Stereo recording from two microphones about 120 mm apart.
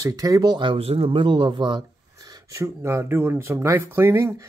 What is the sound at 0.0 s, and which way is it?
Speech, 30° right (ahead or behind).